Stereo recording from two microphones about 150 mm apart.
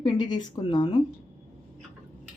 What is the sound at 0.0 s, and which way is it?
Speech, 30° left (ahead or behind).